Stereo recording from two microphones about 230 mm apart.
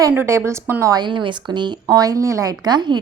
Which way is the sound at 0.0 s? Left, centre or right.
Centre.